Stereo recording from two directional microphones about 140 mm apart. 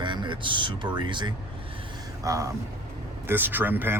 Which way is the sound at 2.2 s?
20° right (ahead or behind).